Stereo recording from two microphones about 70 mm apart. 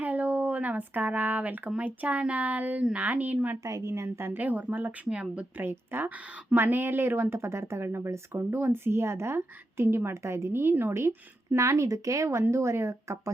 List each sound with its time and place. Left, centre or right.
0.0 s speech: right
3.6 s speech: right
4.4 s speech: right
5.0 s speech: centre
5.6 s speech: right
11.5 s speech: right